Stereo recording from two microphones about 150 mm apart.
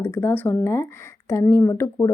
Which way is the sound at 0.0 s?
15° left (ahead or behind).